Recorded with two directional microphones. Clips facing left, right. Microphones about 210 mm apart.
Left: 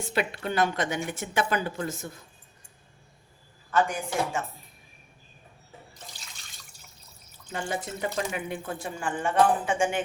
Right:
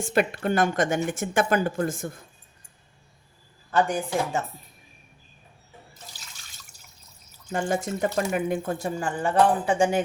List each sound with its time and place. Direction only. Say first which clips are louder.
0.0 s speech: right 5 dB; 50° right (ahead or behind)
3.7 s speech: right 3 dB; 35° right (ahead or behind)
7.5 s speech: right 6 dB; 45° right (ahead or behind)